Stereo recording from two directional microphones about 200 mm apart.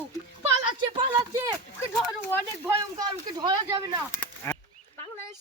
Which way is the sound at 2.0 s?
10° left (ahead or behind).